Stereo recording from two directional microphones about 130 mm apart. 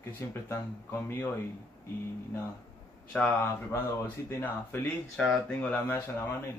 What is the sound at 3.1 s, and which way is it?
Speech, 10° left (ahead or behind).